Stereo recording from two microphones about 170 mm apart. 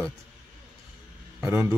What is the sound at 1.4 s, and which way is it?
Speech, 15° right (ahead or behind).